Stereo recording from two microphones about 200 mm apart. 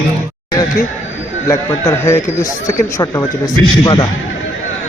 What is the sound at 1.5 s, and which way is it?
A man's voice, 15° left (ahead or behind).